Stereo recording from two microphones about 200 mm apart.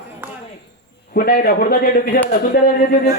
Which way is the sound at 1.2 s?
50° left (ahead or behind).